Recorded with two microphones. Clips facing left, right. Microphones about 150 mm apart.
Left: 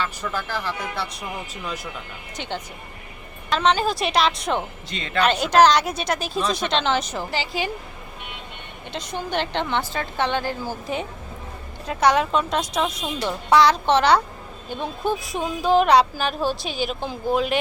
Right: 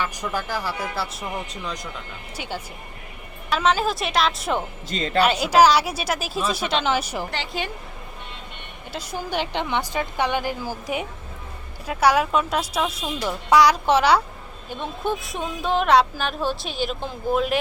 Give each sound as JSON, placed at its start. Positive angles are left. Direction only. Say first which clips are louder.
{"t": 0.0, "sound": "a woman's voice", "louder": "right 1 dB", "side_deg": -15}
{"t": 2.3, "sound": "a woman's voice", "louder": "left 1 dB", "side_deg": -10}
{"t": 4.9, "sound": "a woman's voice", "louder": "right 5 dB", "side_deg": -40}
{"t": 5.2, "sound": "a woman's voice", "louder": "left 1 dB", "side_deg": -5}
{"t": 7.3, "sound": "speech", "louder": "left 3 dB", "side_deg": 0}
{"t": 8.9, "sound": "a woman's voice", "louder": "left 1 dB", "side_deg": -5}